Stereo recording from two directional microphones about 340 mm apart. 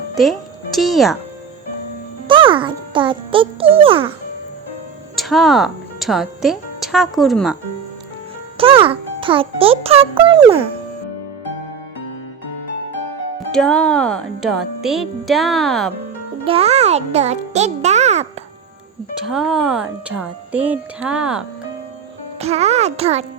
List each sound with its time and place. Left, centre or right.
0.2 s speech: centre
2.2 s music: centre
5.1 s speech: centre
8.5 s a child's voice: centre
13.5 s speech: centre
16.4 s a child's voice: centre
19.2 s speech: centre
22.4 s a child's voice: centre